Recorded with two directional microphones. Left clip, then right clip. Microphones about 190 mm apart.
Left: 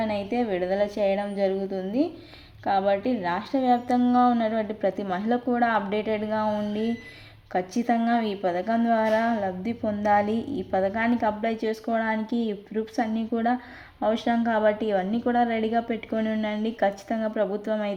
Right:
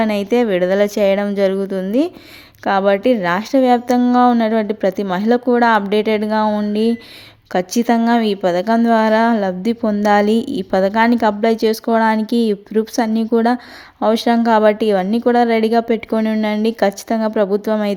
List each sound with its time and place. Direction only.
0.0 s a woman's voice: 35° right (ahead or behind)